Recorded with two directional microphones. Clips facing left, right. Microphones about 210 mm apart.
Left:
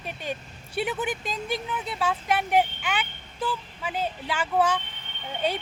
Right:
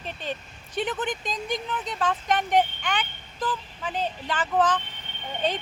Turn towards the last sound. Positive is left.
turn(degrees=10)  # may be behind; listen again after turning